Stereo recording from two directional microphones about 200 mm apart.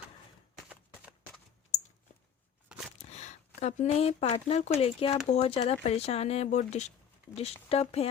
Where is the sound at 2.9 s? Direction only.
35° left (ahead or behind).